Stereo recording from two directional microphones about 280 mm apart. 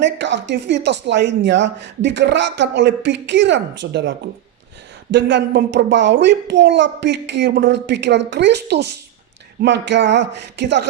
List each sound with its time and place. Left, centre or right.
0.0 s speech: right
5.1 s speech: right